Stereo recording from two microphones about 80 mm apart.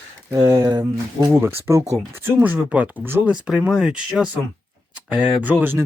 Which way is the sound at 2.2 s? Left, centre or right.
Right.